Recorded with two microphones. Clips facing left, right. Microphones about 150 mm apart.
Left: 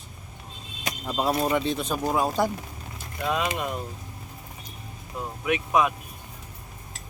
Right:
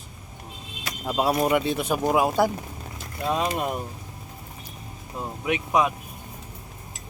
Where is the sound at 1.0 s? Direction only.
10° right (ahead or behind).